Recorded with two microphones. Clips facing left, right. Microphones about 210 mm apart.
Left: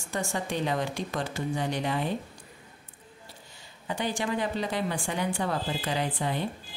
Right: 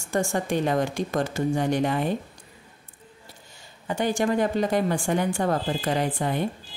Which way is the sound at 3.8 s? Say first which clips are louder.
Right 6 dB; 45° right (ahead or behind).